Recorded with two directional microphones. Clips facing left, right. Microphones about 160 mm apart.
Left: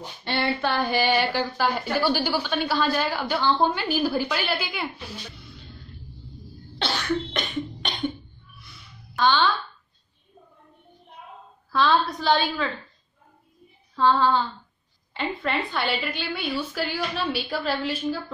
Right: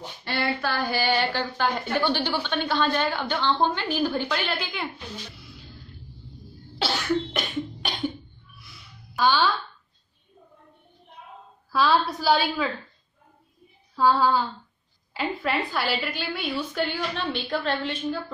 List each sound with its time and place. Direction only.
0.2 s a sound: 25° left (ahead or behind)
1.0 s a woman's voice: 10° left (ahead or behind)
6.8 s cough: 5° right (ahead or behind)
8.5 s a sound: centre (ahead or behind)
11.7 s a woman's voice: 5° right (ahead or behind)
13.9 s female singing: 10° right (ahead or behind)
15.1 s a woman's voice: 5° right (ahead or behind)